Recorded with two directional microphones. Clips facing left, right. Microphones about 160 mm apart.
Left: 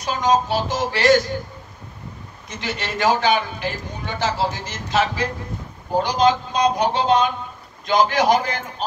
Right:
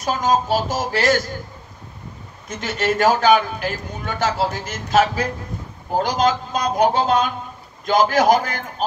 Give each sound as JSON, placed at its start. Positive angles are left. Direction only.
{"t": 0.0, "sound": "a man's voice", "side_deg": -45}
{"t": 2.6, "sound": "a man's voice", "side_deg": -45}